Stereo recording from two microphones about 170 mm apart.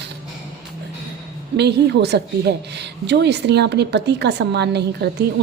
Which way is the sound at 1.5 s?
80° right.